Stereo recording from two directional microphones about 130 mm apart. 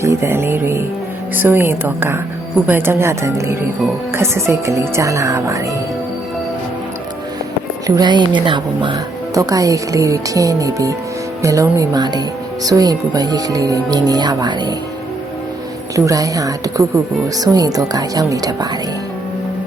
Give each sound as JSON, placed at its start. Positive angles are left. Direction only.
{"t": 0.0, "sound": "music", "side_deg": -20}
{"t": 1.4, "sound": "a woman's voice", "side_deg": -15}
{"t": 7.9, "sound": "a woman's voice", "side_deg": -35}
{"t": 9.3, "sound": "speech", "side_deg": -25}
{"t": 16.0, "sound": "speech", "side_deg": -25}